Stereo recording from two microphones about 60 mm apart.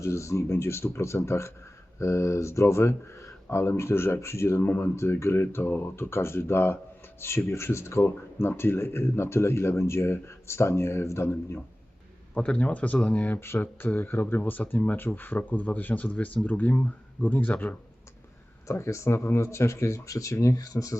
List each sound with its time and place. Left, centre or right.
0.0 s speech: left
12.3 s speech: left
18.7 s speech: left